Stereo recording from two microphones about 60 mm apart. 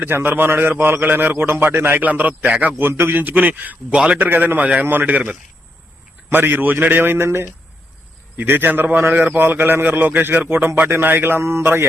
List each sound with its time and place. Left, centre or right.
0.0 s a man's voice: right
3.9 s a man's voice: centre
4.2 s a man's voice: right
6.3 s a man's voice: right